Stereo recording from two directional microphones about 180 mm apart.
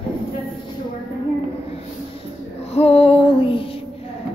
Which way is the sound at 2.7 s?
35° left (ahead or behind).